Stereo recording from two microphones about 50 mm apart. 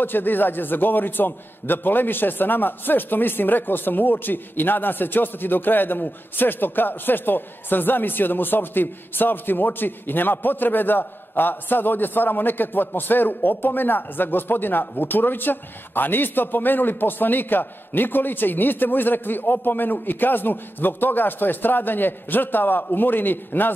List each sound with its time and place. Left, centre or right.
0.0 s a man's voice: left